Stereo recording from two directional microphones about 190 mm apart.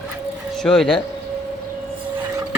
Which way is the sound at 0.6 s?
5° left (ahead or behind).